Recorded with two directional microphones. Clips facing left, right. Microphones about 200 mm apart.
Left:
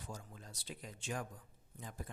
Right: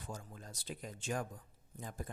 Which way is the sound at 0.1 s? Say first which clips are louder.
Right 4 dB; 45° right (ahead or behind).